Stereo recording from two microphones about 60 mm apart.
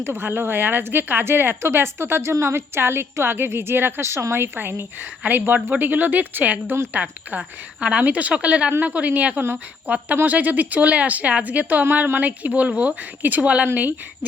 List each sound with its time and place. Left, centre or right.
0.0 s a woman's voice: right